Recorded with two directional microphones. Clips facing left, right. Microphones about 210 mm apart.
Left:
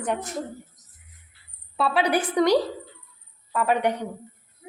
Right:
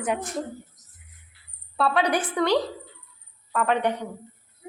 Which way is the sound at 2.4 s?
15° left (ahead or behind).